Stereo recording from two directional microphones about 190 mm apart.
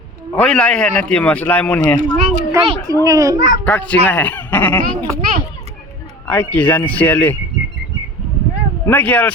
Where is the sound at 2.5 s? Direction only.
20° right (ahead or behind).